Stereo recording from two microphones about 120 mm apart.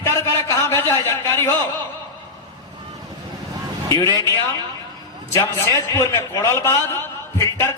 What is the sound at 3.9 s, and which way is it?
A man's voice, 30° left (ahead or behind).